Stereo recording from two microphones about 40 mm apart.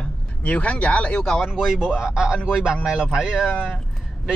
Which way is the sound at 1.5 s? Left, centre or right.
Centre.